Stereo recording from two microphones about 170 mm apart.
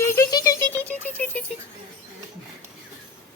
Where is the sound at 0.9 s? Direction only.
10° left (ahead or behind).